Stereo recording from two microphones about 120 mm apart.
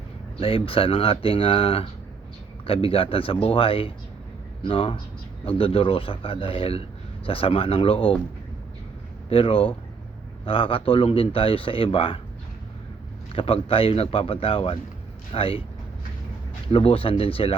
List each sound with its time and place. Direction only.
0.3 s speech: 50° left (ahead or behind)
9.3 s speech: 50° left (ahead or behind)
13.3 s speech: 50° left (ahead or behind)
16.7 s speech: 55° left (ahead or behind)